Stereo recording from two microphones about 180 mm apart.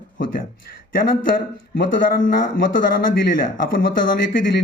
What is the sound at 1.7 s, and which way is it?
Speech, 50° left (ahead or behind).